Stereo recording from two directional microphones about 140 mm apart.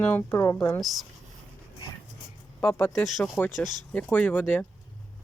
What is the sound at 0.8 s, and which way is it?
Speech, centre (ahead or behind).